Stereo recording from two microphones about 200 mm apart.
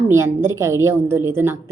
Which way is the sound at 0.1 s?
15° right (ahead or behind).